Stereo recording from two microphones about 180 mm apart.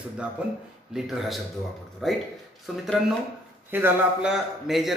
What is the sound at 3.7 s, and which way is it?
A man's voice, 5° right (ahead or behind).